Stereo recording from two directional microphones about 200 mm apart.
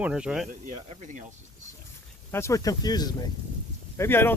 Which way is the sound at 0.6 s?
40° right (ahead or behind).